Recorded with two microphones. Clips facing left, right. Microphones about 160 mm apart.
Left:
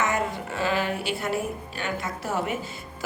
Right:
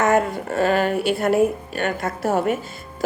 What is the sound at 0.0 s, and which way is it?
A woman's voice, 55° right (ahead or behind).